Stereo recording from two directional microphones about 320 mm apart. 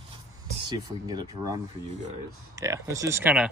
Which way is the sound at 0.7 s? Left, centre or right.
Centre.